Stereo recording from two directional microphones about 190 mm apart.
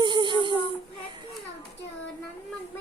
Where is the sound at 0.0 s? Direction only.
25° right (ahead or behind).